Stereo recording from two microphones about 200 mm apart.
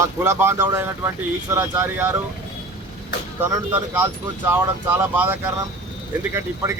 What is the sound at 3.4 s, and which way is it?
Speech, 10° right (ahead or behind).